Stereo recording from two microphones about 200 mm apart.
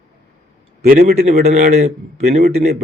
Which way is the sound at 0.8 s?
45° right (ahead or behind).